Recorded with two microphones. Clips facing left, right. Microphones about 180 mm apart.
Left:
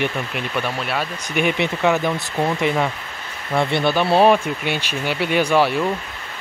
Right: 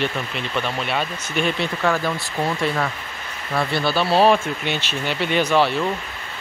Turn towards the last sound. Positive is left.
turn(degrees=10)  # may be behind; listen again after turning